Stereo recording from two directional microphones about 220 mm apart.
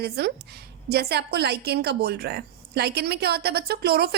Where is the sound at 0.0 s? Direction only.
45° right (ahead or behind).